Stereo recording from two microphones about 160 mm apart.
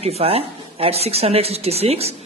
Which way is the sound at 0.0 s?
40° right (ahead or behind).